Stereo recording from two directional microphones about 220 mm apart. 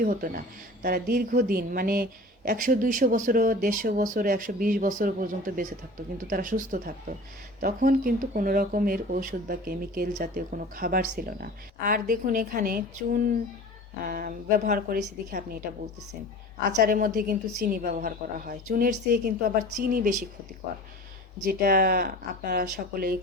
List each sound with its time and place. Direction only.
0.0 s speech: 40° right (ahead or behind)
16.8 s speech: 40° right (ahead or behind)
21.4 s speech: 40° right (ahead or behind)